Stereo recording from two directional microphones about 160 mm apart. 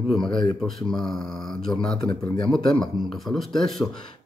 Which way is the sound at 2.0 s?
30° left (ahead or behind).